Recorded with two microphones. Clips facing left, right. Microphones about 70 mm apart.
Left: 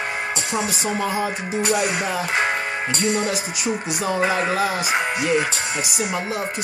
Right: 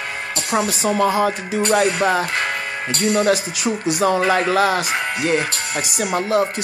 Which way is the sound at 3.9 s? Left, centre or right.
Right.